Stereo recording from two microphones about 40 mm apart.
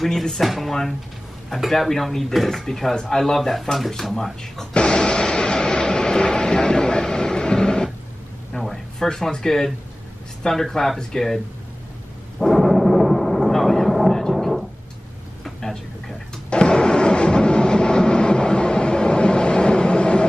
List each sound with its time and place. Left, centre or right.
0.0 s dishes: centre
0.4 s speech: centre
1.7 s dishes: centre
4.7 s vehicle: left
8.5 s a sound: centre
10.4 s dishes: centre
12.4 s a sound: centre
15.4 s vehicle: centre
16.4 s train: left